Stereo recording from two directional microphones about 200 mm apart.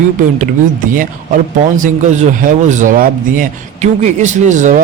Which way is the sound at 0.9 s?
40° right (ahead or behind).